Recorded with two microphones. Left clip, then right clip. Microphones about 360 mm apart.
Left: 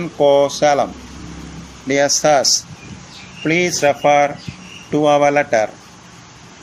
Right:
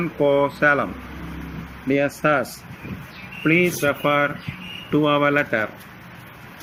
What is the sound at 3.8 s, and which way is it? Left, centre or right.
Speech, centre.